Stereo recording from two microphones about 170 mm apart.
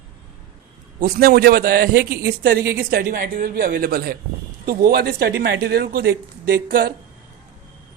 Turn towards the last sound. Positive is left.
turn(degrees=-60)  # may be behind; listen again after turning